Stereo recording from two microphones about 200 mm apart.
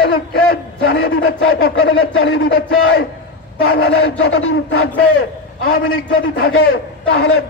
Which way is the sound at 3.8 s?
85° left.